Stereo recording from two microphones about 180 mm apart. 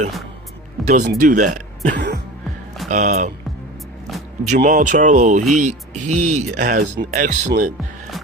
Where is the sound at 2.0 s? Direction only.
70° right (ahead or behind).